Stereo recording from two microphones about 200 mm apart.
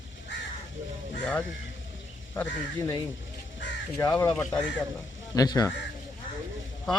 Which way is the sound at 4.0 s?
15° left (ahead or behind).